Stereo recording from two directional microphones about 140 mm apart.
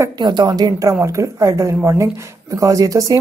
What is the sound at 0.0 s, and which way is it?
Speech, 30° right (ahead or behind).